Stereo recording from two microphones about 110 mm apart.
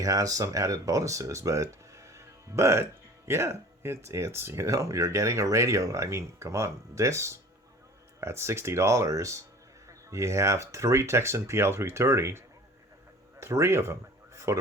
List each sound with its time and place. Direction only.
0.0 s speech: 30° right (ahead or behind)
13.4 s speech: 25° right (ahead or behind)